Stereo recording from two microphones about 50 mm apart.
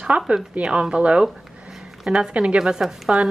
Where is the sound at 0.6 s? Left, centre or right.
Centre.